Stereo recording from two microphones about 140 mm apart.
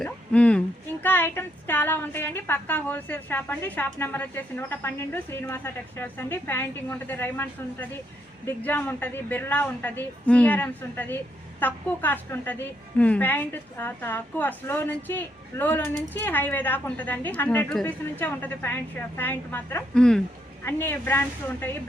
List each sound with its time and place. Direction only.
0.0 s a woman's voice: 10° left (ahead or behind)
20.7 s a woman's voice: 15° left (ahead or behind)